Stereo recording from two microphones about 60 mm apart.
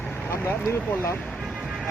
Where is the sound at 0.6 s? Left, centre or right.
Left.